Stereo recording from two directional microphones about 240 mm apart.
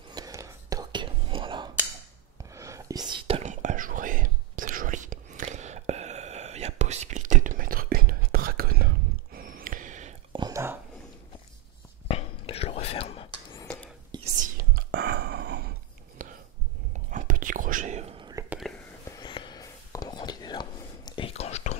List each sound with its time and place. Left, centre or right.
0.1 s whispering: centre
3.2 s whispering: right
10.3 s whispering: centre
12.1 s whispering: left
14.3 s whispering: right
16.2 s a sound: right
17.1 s whispering: right
19.0 s whispering: centre